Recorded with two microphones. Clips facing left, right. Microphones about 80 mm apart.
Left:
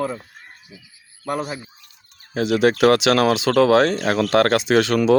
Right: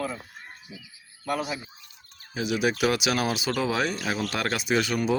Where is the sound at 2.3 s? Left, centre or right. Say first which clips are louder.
Left 8 dB; left.